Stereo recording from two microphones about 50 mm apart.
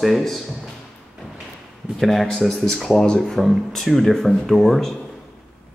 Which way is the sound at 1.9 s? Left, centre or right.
Centre.